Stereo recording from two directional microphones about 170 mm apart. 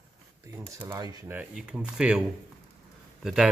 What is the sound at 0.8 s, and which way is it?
Speech, 15° right (ahead or behind).